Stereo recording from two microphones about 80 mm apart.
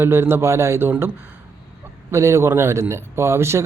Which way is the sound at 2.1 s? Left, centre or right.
Right.